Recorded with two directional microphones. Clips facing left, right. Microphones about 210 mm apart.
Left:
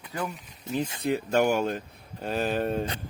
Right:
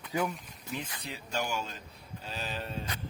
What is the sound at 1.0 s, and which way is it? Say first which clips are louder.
Speech: left 15 dB; 55° left (ahead or behind).